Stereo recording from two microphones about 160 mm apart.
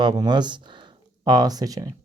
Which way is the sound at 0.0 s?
25° right (ahead or behind).